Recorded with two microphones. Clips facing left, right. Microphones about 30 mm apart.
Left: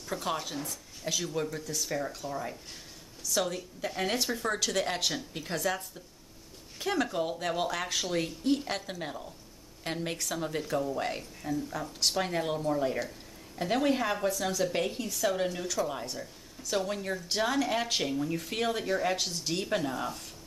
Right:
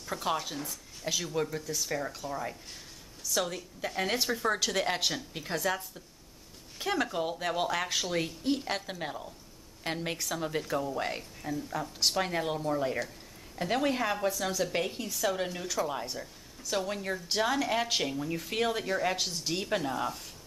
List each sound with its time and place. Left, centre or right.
0.0 s a woman's voice: centre